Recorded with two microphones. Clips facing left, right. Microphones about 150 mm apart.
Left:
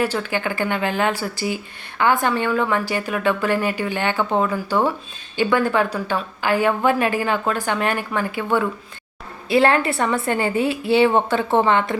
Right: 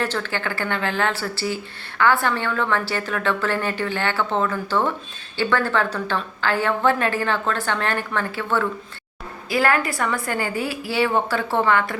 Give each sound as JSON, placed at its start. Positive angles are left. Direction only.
{"t": 0.0, "sound": "a woman's voice", "side_deg": 10}
{"t": 9.5, "sound": "a woman's voice", "side_deg": 25}